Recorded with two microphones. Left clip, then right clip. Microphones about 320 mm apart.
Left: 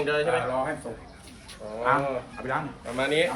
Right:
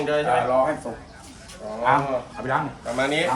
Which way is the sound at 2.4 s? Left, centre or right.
Right.